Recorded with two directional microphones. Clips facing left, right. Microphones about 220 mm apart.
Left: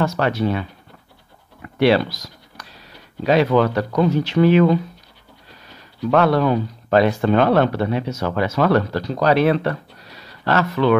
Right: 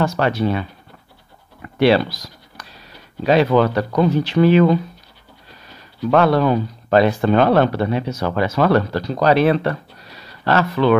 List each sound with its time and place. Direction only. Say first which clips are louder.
0.0 s speech: right 1 dB; 30° right (ahead or behind)
1.8 s speech: right 1 dB; 30° right (ahead or behind)
6.0 s speech: right 1 dB; 30° right (ahead or behind)